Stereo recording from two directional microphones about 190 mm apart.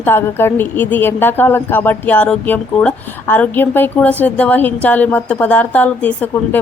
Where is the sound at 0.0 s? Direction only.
10° left (ahead or behind).